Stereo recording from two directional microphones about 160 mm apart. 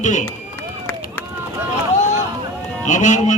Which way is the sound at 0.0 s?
50° left (ahead or behind).